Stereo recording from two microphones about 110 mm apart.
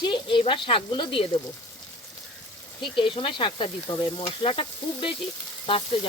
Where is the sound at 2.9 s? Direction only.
55° left (ahead or behind).